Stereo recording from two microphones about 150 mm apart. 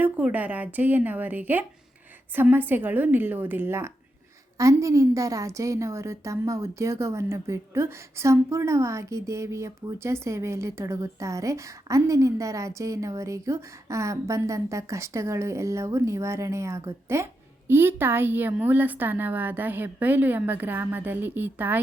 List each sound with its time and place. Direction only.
0.0 s a woman's voice: 10° right (ahead or behind)